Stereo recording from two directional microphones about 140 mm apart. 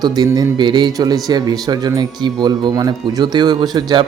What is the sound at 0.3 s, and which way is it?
Speech, 30° right (ahead or behind).